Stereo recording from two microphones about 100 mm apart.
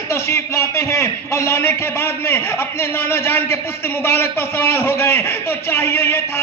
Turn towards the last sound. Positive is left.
turn(degrees=20)  # may be behind; listen again after turning